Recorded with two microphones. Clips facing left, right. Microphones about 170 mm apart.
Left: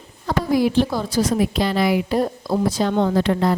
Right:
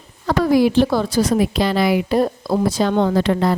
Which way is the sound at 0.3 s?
85° right.